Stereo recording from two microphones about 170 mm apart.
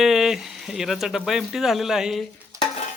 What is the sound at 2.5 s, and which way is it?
Stir, 20° right (ahead or behind).